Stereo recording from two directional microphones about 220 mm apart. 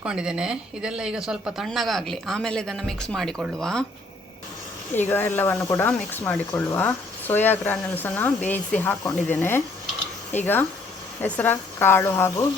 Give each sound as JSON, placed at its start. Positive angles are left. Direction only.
{"t": 0.0, "sound": "speech", "side_deg": -5}
{"t": 4.9, "sound": "speech", "side_deg": 10}